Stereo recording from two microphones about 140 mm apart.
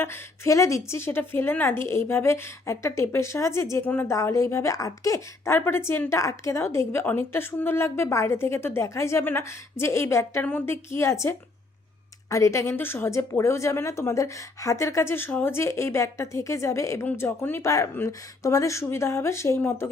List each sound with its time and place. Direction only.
0.0 s a woman's voice: 20° left (ahead or behind)